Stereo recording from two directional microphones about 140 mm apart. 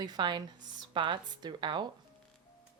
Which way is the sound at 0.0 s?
30° right (ahead or behind).